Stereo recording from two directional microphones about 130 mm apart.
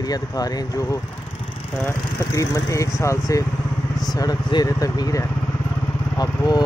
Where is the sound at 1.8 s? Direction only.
25° left (ahead or behind).